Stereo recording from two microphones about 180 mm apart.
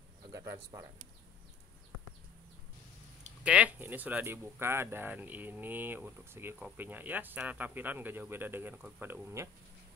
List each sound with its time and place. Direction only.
0.3 s cricket: 15° right (ahead or behind)
3.4 s speech: 5° right (ahead or behind)